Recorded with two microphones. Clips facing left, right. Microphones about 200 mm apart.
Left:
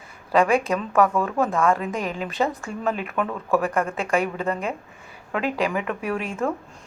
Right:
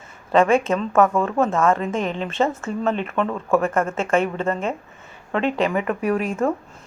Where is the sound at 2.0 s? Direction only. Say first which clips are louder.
Right 1 dB; 10° left (ahead or behind).